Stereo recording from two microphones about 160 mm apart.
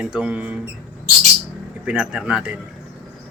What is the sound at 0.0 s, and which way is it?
Speech, 5° right (ahead or behind).